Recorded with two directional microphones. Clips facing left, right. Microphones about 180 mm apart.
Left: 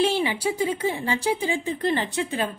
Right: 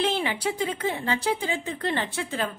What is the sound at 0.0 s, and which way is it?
A woman's voice, 10° left (ahead or behind).